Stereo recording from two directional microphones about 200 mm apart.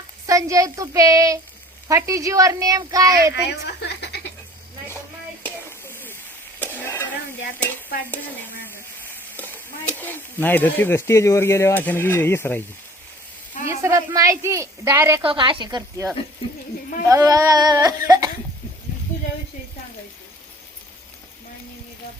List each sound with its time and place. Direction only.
0.3 s a woman's voice: 15° right (ahead or behind)
3.4 s speech: 55° left (ahead or behind)
5.4 s a sound: 10° left (ahead or behind)
6.6 s stir: 10° left (ahead or behind)
8.6 s speech: 10° left (ahead or behind)
13.7 s a woman's voice: 15° right (ahead or behind)
15.2 s speech: 25° right (ahead or behind)